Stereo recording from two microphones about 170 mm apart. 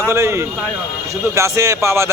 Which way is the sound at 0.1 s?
15° right (ahead or behind).